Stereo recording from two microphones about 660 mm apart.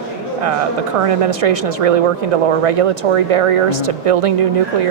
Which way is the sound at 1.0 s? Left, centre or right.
Right.